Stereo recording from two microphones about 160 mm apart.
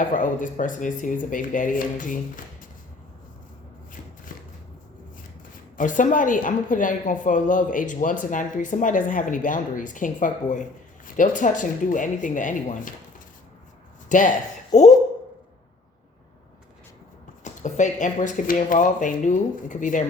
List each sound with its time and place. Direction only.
0.0 s a woman's voice: 55° left (ahead or behind)
4.3 s a sound: 60° left (ahead or behind)
5.7 s a woman's voice: 55° left (ahead or behind)
17.4 s speech: 50° left (ahead or behind)